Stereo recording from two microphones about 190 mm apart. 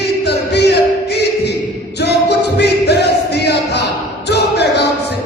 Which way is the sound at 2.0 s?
60° left (ahead or behind).